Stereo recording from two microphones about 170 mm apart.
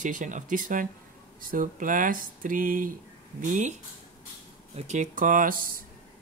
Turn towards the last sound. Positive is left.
turn(degrees=-55)  # may be behind; listen again after turning